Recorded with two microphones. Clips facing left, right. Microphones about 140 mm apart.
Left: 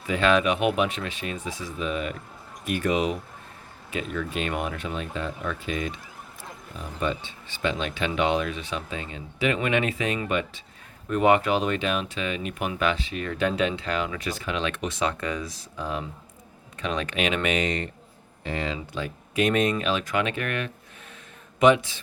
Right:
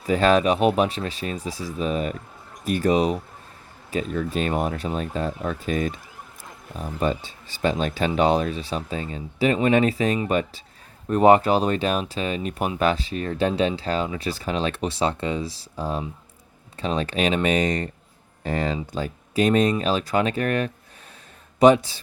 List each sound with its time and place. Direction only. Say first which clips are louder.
0.1 s speech: right 4 dB; 40° right (ahead or behind)